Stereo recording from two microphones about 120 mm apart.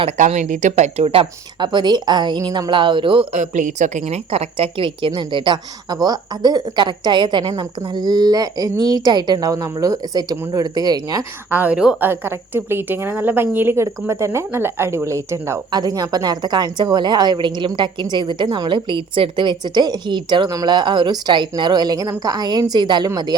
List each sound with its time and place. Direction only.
0.2 s speech: 85° right; by 1.6 s 50° right (ahead or behind)
1.6 s a woman's voice: 40° right (ahead or behind)
3.3 s a woman's voice: 90° right; by 11.3 s 35° right (ahead or behind)
11.5 s a woman's voice: 15° right (ahead or behind)
12.0 s a woman's voice: 20° right (ahead or behind); by 23.3 s 35° right (ahead or behind)